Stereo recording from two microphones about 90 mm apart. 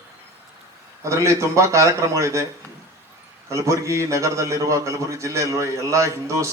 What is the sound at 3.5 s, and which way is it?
A man's voice, 35° right (ahead or behind).